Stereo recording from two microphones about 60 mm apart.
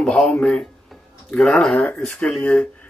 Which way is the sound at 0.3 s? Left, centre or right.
Centre.